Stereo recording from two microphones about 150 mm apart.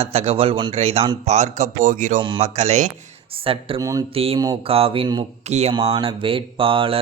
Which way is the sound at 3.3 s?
35° right (ahead or behind).